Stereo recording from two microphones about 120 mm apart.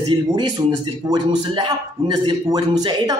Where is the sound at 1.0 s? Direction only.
40° right (ahead or behind).